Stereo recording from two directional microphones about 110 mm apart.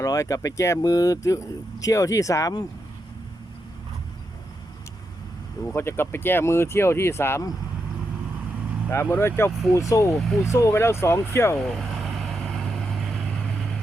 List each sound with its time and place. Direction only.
0.0 s speech: 30° left (ahead or behind)
5.7 s speech: 20° left (ahead or behind)
8.9 s speech: 20° left (ahead or behind)
11.5 s vehicle: centre (ahead or behind)